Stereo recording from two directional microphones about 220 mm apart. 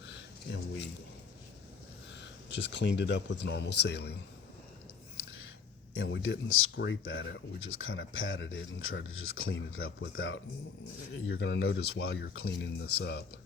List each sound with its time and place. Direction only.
0.4 s a sound: 50° left (ahead or behind)
2.2 s speech: 55° left (ahead or behind)
5.9 s speech: 65° left (ahead or behind)